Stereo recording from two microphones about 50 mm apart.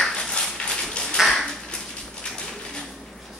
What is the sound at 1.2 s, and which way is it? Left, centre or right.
Ping, centre.